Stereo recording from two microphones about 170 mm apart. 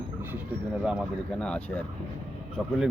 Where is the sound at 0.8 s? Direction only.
5° right (ahead or behind).